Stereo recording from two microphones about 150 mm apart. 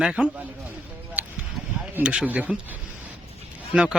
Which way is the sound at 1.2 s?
10° right (ahead or behind).